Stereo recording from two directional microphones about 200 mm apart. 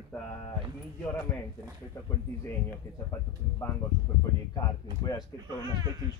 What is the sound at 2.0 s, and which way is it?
Speech, 15° left (ahead or behind).